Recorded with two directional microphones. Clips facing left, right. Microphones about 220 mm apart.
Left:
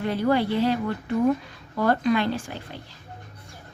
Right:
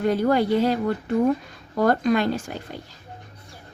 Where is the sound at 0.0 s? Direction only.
45° right (ahead or behind).